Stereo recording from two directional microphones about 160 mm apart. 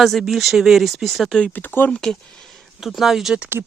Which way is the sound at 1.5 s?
10° left (ahead or behind).